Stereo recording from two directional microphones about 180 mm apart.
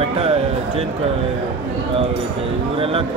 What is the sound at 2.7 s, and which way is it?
Speech, 30° right (ahead or behind).